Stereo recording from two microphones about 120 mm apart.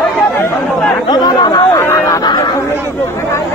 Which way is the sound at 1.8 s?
20° left (ahead or behind).